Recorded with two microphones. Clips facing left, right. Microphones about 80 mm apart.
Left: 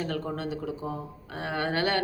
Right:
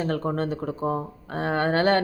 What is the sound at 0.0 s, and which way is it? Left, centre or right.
Speech, right.